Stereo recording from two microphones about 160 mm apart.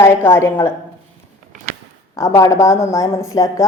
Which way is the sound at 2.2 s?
20° left (ahead or behind).